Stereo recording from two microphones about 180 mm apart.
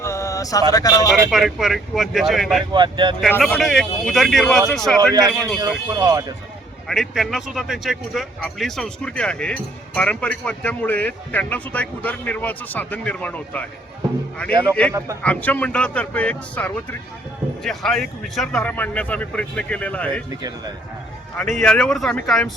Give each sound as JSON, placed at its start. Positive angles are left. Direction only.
{"t": 0.0, "sound": "a sound", "side_deg": 15}
{"t": 1.3, "sound": "speech", "side_deg": 0}
{"t": 2.7, "sound": "speech", "side_deg": -25}
{"t": 3.2, "sound": "a man's voice", "side_deg": 5}
{"t": 5.9, "sound": "speech", "side_deg": -20}
{"t": 6.8, "sound": "a man's voice", "side_deg": 0}
{"t": 14.9, "sound": "a man's voice", "side_deg": -15}
{"t": 15.2, "sound": "a man's voice", "side_deg": 10}
{"t": 21.5, "sound": "speech", "side_deg": 5}